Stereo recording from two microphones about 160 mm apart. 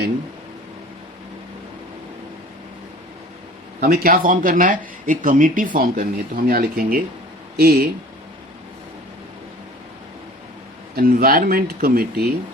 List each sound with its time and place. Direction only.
3.8 s speech: 65° right (ahead or behind)
10.9 s speech: 70° right (ahead or behind)